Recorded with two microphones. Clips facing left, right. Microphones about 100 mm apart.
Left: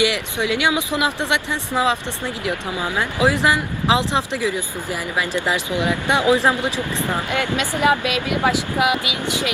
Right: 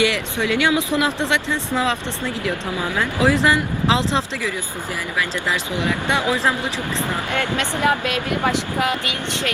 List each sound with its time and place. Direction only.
0.0 s speech: 20° left (ahead or behind)